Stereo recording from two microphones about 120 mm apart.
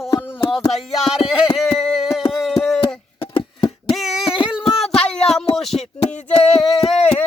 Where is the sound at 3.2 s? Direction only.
40° left (ahead or behind).